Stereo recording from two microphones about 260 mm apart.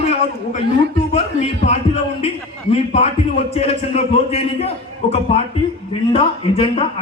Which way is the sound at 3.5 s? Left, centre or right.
Left.